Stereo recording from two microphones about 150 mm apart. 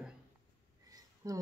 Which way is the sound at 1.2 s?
25° right (ahead or behind).